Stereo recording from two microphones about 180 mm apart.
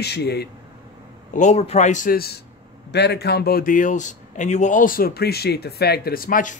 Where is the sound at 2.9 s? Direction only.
65° left (ahead or behind).